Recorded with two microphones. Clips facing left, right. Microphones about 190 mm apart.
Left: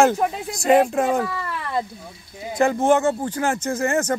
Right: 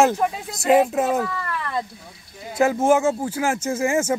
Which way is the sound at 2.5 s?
5° right (ahead or behind).